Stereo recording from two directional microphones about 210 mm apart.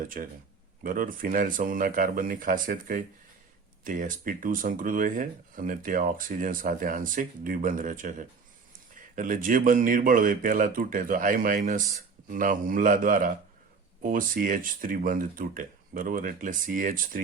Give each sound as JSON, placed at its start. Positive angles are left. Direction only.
{"t": 0.0, "sound": "speech", "side_deg": -40}